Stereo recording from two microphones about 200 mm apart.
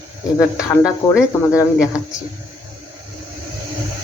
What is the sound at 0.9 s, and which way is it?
Speech, 15° left (ahead or behind).